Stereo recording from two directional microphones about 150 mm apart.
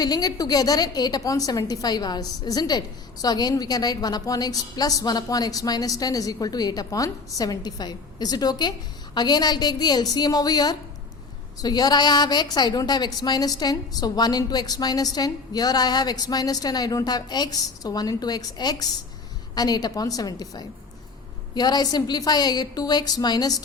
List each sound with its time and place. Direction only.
0.0 s a woman's voice: 25° left (ahead or behind)